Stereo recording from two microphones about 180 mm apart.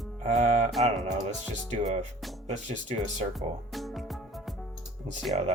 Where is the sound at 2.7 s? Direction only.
45° right (ahead or behind).